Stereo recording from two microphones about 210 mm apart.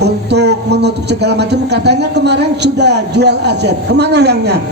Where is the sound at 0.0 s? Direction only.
50° right (ahead or behind).